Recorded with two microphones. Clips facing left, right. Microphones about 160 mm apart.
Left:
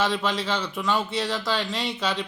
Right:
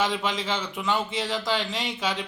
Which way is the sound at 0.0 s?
15° right (ahead or behind).